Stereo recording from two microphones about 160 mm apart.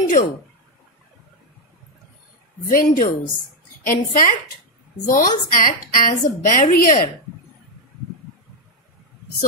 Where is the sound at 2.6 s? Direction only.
65° left (ahead or behind).